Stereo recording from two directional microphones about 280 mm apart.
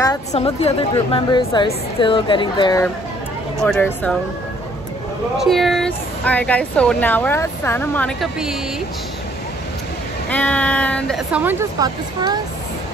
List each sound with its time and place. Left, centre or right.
0.3 s a woman's voice: left; by 4.1 s centre
5.4 s speech: centre
10.3 s speech: centre